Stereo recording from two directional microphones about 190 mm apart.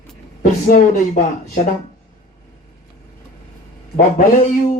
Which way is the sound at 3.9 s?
45° left (ahead or behind).